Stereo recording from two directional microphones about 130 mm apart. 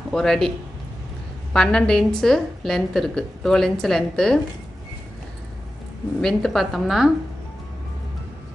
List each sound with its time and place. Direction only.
0.1 s a woman's voice: 5° left (ahead or behind)
1.5 s a woman's voice: 5° left (ahead or behind)
6.2 s a woman's voice: centre (ahead or behind)